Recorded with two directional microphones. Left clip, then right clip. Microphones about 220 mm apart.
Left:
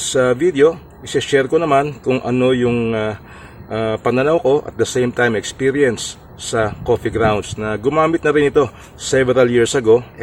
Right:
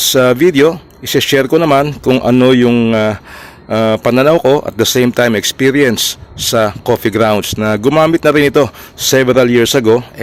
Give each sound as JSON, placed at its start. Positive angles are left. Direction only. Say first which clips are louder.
{"t": 0.1, "sound": "speech", "louder": "right 4 dB", "side_deg": -45}